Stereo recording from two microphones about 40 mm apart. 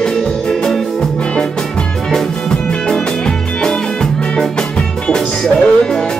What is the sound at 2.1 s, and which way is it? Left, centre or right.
Music, centre.